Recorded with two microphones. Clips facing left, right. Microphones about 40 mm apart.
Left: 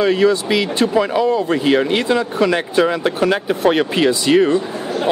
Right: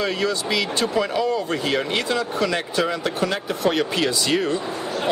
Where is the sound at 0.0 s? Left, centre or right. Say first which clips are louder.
Left 9 dB; centre.